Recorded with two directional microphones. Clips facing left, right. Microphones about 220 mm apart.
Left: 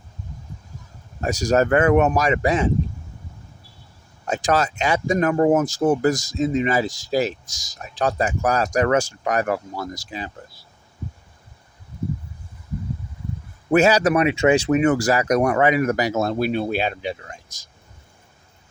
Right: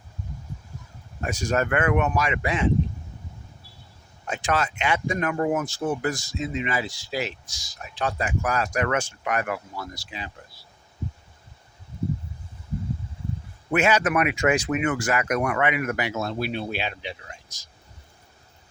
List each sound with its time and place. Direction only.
1.2 s speech: 40° left (ahead or behind)
4.3 s speech: 40° left (ahead or behind)
13.7 s speech: 40° left (ahead or behind)